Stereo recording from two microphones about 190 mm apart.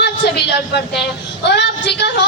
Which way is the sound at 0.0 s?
60° left (ahead or behind).